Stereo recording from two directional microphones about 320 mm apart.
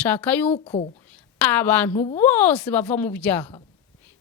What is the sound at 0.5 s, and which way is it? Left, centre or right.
Speech, centre.